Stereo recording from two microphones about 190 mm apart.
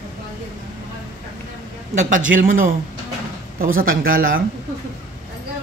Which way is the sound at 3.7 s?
50° right (ahead or behind).